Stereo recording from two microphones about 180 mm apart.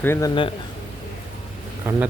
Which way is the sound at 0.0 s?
15° left (ahead or behind).